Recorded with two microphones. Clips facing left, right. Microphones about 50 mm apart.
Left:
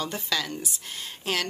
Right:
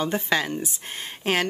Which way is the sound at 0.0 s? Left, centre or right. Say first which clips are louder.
Right 6 dB; right.